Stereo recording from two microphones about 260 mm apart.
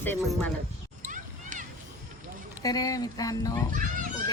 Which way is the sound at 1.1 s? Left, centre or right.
Right.